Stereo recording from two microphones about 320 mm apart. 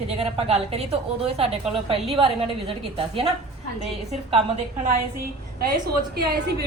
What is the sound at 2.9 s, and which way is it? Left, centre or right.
Speech, centre.